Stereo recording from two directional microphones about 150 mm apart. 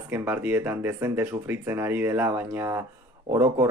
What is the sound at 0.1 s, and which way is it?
Speech, 15° right (ahead or behind).